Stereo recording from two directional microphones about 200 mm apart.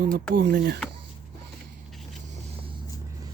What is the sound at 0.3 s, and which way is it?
Speech, 55° right (ahead or behind).